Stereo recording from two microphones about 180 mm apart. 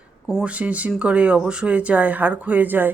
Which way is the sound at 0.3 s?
Centre (ahead or behind).